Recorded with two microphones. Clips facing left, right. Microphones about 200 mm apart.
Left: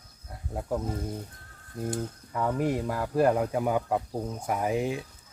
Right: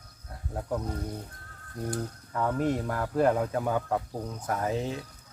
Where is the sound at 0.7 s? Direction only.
20° left (ahead or behind).